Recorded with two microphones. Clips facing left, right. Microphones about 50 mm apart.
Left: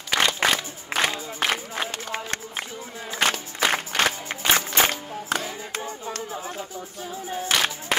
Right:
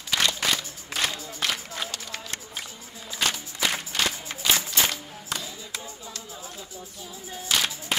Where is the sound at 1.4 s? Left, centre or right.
Centre.